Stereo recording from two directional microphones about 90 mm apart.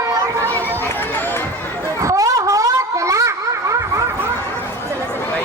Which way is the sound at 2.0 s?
35° right (ahead or behind).